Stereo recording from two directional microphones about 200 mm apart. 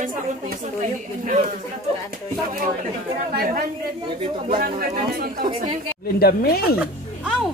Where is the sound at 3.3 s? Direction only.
45° right (ahead or behind).